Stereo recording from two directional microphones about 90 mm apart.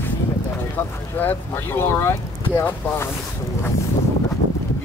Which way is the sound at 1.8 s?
25° left (ahead or behind).